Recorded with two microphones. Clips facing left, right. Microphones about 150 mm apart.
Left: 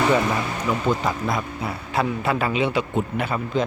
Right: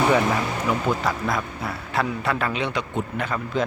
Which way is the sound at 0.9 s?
Centre (ahead or behind).